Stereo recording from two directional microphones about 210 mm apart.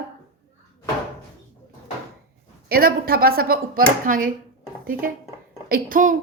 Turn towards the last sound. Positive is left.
turn(degrees=-40)  # may be behind; listen again after turning